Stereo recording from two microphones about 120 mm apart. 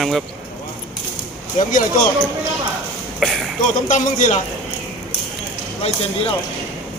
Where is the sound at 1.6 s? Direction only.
90° left.